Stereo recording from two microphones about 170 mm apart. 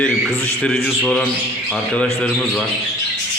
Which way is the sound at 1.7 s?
5° left (ahead or behind).